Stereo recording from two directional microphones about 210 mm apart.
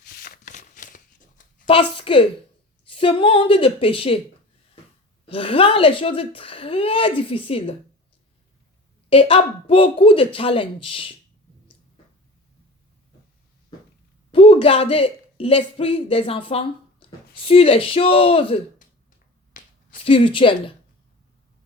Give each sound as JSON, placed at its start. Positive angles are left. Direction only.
{"t": 0.2, "sound": "shuffling cards", "side_deg": 40}
{"t": 1.6, "sound": "speech", "side_deg": 25}
{"t": 5.2, "sound": "speech", "side_deg": 25}
{"t": 9.0, "sound": "speech", "side_deg": 25}
{"t": 14.3, "sound": "speech", "side_deg": 25}
{"t": 19.6, "sound": "finger snapping", "side_deg": 40}
{"t": 20.1, "sound": "speech", "side_deg": 25}